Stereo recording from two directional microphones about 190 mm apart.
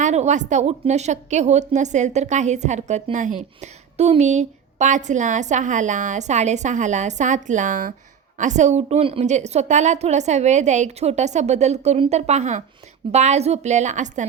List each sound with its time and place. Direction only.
0.0 s a woman's voice: 35° right (ahead or behind)